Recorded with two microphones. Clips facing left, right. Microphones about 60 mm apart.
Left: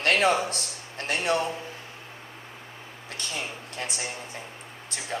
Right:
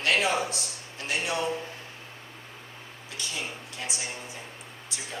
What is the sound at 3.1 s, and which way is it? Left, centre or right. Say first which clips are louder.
Speech: left 1 dB; left.